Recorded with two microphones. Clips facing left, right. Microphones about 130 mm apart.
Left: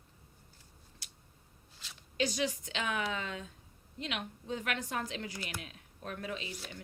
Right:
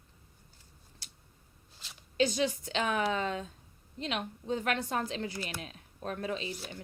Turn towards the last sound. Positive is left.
turn(degrees=-30)  # may be behind; listen again after turning